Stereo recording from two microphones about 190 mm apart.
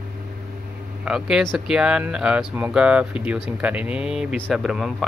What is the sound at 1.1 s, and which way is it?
Speech, 5° right (ahead or behind).